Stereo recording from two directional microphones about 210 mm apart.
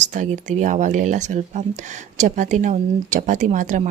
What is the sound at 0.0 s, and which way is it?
Speech, 35° right (ahead or behind).